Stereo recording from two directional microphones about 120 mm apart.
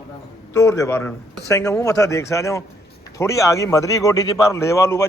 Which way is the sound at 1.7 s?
30° left (ahead or behind).